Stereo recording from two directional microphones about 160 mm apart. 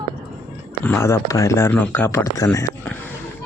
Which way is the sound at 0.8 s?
15° left (ahead or behind).